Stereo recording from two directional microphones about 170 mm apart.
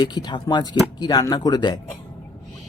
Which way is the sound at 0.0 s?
25° left (ahead or behind).